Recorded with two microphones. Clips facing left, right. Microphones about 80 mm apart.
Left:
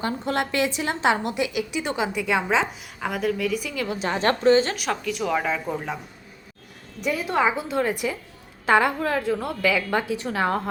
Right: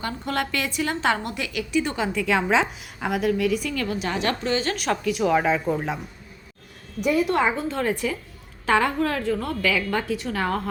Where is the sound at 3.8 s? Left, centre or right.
Left.